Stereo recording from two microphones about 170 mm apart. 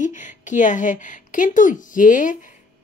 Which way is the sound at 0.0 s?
45° left (ahead or behind).